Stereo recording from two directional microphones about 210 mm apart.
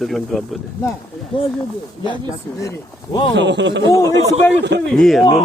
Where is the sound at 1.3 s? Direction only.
20° left (ahead or behind).